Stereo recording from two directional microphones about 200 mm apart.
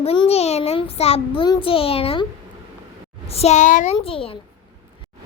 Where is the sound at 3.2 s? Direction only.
30° left (ahead or behind).